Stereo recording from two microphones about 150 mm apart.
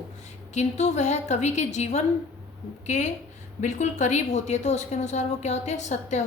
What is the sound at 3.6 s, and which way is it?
A woman's voice, 55° left (ahead or behind).